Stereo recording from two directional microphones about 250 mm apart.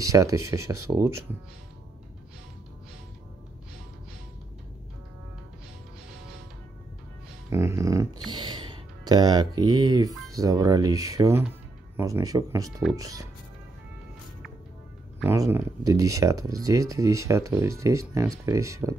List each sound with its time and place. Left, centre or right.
0.0 s speech: centre
7.4 s speech: centre
15.1 s speech: centre